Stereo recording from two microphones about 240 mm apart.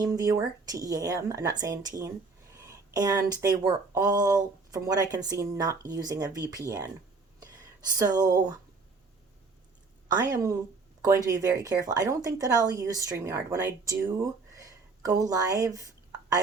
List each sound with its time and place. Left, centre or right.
0.0 s speech: centre
7.9 s speech: centre
10.2 s speech: centre